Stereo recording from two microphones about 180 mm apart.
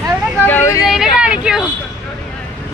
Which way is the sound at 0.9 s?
5° right (ahead or behind).